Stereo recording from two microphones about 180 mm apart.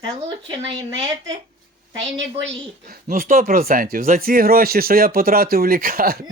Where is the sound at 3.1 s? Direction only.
50° right (ahead or behind).